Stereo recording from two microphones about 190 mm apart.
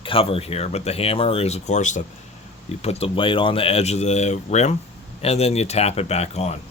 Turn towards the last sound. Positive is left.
turn(degrees=35)  # may be behind; listen again after turning